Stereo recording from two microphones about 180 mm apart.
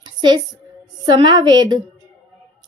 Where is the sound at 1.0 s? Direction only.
25° right (ahead or behind).